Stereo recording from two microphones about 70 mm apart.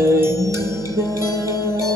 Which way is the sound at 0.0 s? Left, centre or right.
Right.